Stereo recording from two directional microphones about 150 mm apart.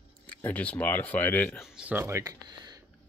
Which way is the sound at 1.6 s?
5° right (ahead or behind).